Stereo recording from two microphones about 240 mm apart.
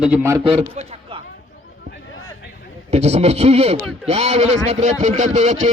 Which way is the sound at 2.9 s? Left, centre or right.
Right.